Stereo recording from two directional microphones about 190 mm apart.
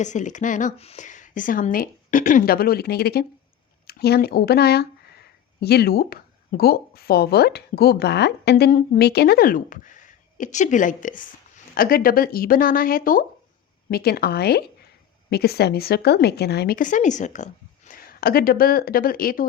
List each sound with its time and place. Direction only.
0.0 s speech: 40° left (ahead or behind)